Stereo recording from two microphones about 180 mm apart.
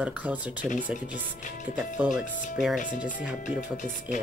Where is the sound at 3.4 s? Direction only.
45° left (ahead or behind).